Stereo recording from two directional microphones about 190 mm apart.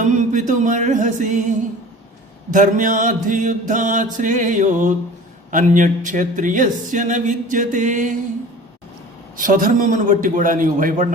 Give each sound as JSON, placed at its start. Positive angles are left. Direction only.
{"t": 0.0, "sound": "music", "side_deg": -40}
{"t": 2.5, "sound": "mantra", "side_deg": -45}
{"t": 5.5, "sound": "speech", "side_deg": -45}
{"t": 9.4, "sound": "mantra", "side_deg": -45}